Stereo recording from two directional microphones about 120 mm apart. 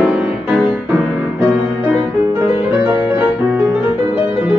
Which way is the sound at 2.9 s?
15° right (ahead or behind).